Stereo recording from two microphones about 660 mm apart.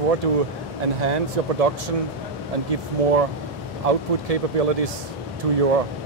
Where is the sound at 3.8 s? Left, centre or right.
Right.